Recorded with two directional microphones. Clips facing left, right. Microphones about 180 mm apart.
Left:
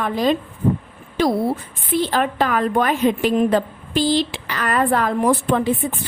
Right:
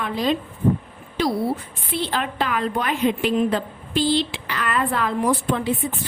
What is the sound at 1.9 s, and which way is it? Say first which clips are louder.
A woman's voice: left 5 dB; 45° left (ahead or behind).